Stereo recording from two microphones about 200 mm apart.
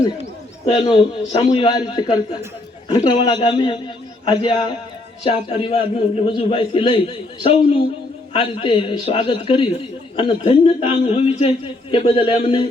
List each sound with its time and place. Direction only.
0.6 s a man's voice: 20° left (ahead or behind)